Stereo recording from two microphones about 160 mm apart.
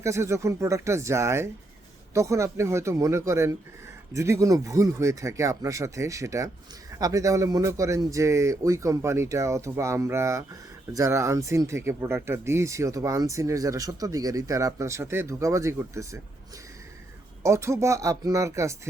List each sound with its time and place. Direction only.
0.0 s speech: 20° right (ahead or behind)
17.4 s speech: 15° right (ahead or behind)